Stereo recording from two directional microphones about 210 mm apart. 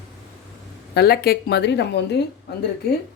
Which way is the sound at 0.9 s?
50° left (ahead or behind).